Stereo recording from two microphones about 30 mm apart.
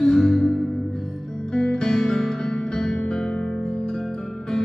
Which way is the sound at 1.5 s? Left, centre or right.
Left.